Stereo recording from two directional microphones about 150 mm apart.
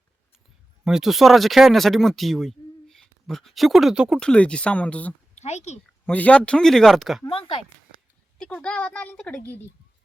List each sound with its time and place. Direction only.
0.9 s a woman's voice: 5° right (ahead or behind)
5.3 s speech: 45° left (ahead or behind)
6.1 s speech: 10° left (ahead or behind)
7.3 s speech: 35° left (ahead or behind)
8.4 s a woman's voice: 5° left (ahead or behind)